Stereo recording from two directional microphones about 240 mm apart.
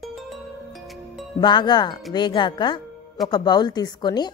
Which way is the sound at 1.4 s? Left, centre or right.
Centre.